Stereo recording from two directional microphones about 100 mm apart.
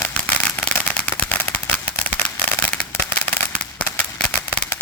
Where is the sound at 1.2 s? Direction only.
15° left (ahead or behind).